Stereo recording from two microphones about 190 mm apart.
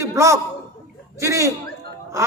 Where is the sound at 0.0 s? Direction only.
15° right (ahead or behind).